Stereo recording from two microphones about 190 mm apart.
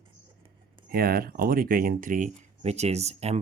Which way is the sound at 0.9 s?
50° right (ahead or behind).